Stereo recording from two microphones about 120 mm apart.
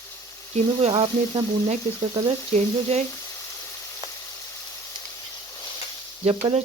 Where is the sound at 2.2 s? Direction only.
65° right (ahead or behind).